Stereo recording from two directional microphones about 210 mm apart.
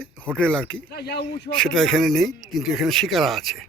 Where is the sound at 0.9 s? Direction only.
50° left (ahead or behind).